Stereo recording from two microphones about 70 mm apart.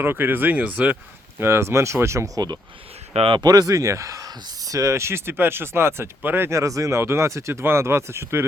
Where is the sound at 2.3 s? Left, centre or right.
Right.